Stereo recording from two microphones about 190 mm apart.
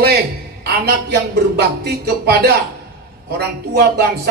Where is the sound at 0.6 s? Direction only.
55° right (ahead or behind).